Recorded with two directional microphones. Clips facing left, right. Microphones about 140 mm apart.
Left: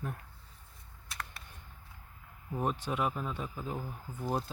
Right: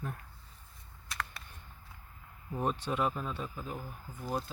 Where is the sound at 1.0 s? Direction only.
90° right.